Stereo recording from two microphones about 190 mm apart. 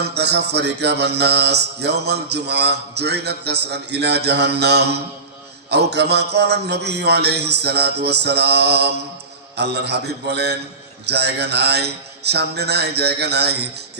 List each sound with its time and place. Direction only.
0.0 s mantra: 60° right (ahead or behind)